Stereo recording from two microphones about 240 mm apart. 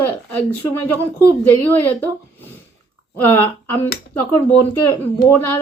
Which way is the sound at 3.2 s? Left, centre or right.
Centre.